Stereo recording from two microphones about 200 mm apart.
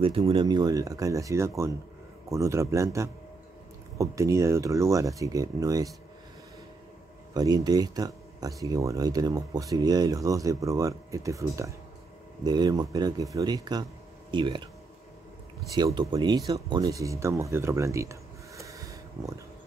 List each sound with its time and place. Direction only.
0.0 s speech: 25° right (ahead or behind)
7.3 s speech: 20° right (ahead or behind)
15.7 s speech: 20° right (ahead or behind)
18.6 s a sound: 15° right (ahead or behind)